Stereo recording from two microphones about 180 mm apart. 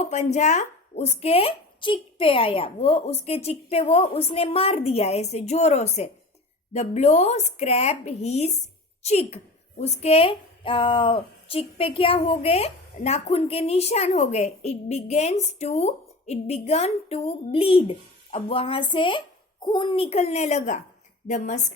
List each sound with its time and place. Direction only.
0.0 s a woman's voice: 40° left (ahead or behind)